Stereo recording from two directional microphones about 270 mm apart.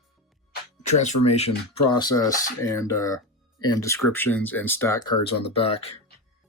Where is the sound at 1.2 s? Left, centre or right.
Left.